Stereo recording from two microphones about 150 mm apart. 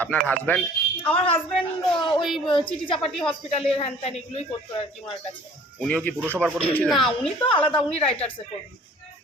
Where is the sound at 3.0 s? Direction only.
5° left (ahead or behind).